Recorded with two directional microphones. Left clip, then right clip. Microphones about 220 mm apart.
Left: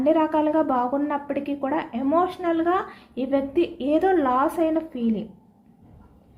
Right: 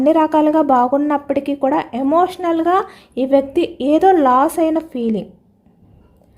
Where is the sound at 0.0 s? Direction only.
50° right (ahead or behind).